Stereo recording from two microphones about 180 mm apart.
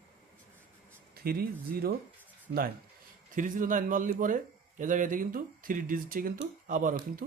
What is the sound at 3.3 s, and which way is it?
Speech, 45° right (ahead or behind).